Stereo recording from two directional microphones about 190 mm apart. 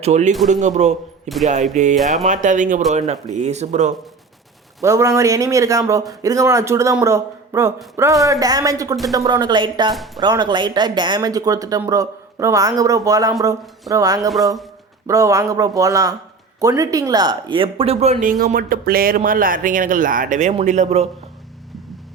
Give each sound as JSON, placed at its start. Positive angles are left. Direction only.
{"t": 0.0, "sound": "speech", "side_deg": -35}
{"t": 4.8, "sound": "a man's voice", "side_deg": -15}